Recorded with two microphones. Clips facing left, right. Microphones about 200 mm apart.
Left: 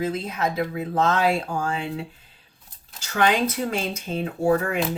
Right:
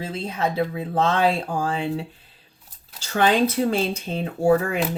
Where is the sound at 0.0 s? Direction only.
30° right (ahead or behind).